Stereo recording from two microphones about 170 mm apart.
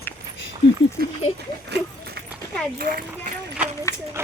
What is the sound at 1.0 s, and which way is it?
Speech, 60° right (ahead or behind).